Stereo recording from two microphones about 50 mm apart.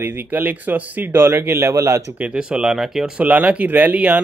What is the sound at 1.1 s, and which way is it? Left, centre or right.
Speech, right.